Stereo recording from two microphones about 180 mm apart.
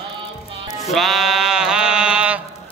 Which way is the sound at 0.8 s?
Centre (ahead or behind).